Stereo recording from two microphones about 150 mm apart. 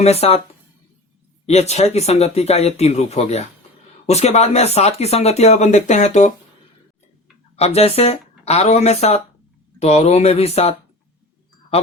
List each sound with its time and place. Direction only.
0.0 s speech: 45° left (ahead or behind)
1.5 s speech: 45° left (ahead or behind)
7.5 s speech: 45° left (ahead or behind)